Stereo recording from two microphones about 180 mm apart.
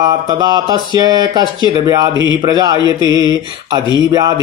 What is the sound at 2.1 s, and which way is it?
Mantra, 25° left (ahead or behind).